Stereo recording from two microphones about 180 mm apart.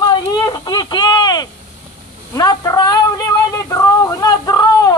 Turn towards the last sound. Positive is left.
turn(degrees=20)  # may be behind; listen again after turning